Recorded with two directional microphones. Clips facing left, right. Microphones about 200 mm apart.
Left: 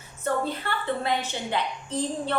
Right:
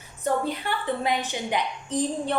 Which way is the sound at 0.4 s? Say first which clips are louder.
Right 1 dB; 15° right (ahead or behind).